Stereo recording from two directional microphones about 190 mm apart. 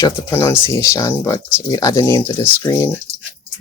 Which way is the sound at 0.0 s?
15° left (ahead or behind).